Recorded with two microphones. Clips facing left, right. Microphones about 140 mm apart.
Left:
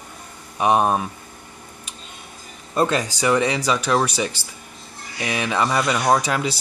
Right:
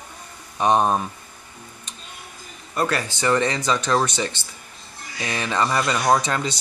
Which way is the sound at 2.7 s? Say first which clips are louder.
Left 3 dB; 25° left (ahead or behind).